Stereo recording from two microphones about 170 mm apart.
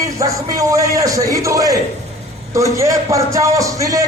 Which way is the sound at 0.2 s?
20° right (ahead or behind).